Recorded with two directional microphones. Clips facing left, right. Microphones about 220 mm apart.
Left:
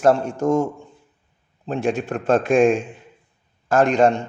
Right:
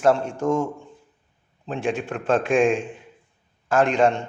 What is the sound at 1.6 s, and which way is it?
Speech, 40° left (ahead or behind).